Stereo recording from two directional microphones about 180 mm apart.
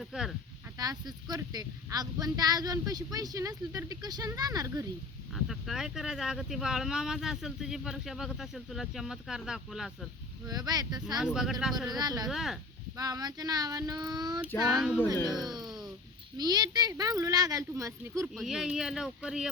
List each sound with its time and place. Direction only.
0.0 s speech: 5° right (ahead or behind)
0.8 s speech: 20° right (ahead or behind)
5.3 s speech: centre (ahead or behind)
10.4 s speech: 20° right (ahead or behind)
11.6 s speech: 5° right (ahead or behind)
11.9 s speech: 20° right (ahead or behind)
12.3 s speech: centre (ahead or behind)
13.0 s speech: 20° right (ahead or behind)
14.7 s speech: centre (ahead or behind)
15.0 s speech: 20° right (ahead or behind)
16.4 s speech: 20° right (ahead or behind)
18.3 s speech: 5° right (ahead or behind)